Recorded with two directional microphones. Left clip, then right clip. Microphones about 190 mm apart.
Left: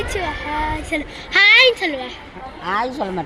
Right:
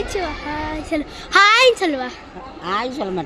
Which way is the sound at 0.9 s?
30° right (ahead or behind).